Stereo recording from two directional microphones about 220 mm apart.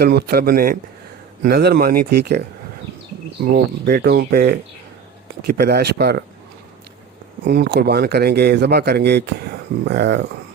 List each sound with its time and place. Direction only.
0.0 s speech: 45° right (ahead or behind)
3.4 s speech: 50° right (ahead or behind)
7.4 s speech: 50° right (ahead or behind)